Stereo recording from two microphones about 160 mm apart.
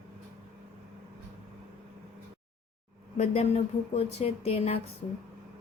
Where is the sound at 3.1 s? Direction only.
40° left (ahead or behind).